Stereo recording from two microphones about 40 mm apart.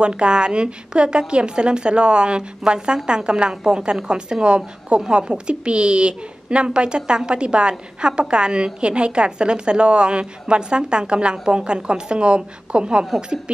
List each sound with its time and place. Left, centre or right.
0.0 s a woman's voice: right